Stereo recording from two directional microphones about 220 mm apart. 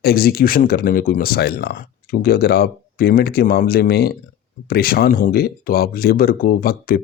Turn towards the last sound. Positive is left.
turn(degrees=40)  # may be behind; listen again after turning